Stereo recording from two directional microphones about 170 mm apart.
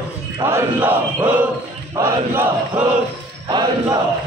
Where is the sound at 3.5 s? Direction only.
25° right (ahead or behind).